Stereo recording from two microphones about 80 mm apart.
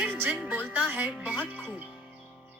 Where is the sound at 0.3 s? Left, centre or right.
Centre.